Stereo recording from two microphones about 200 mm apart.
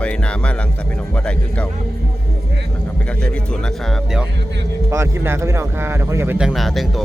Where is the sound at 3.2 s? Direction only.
5° left (ahead or behind).